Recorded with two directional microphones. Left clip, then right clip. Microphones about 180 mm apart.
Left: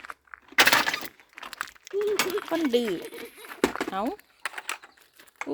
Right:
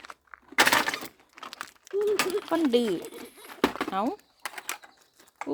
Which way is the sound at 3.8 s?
60° left (ahead or behind).